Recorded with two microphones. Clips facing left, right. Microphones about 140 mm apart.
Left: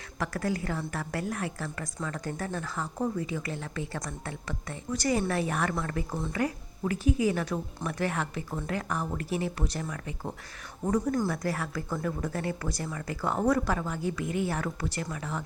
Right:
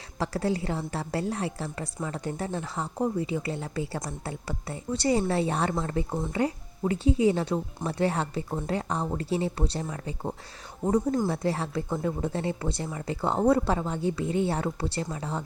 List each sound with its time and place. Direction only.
0.2 s a woman's voice: 30° right (ahead or behind)